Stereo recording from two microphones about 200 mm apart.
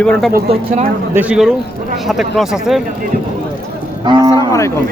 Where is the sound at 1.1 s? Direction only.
5° right (ahead or behind).